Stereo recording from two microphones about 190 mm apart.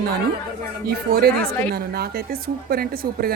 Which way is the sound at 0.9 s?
55° right (ahead or behind).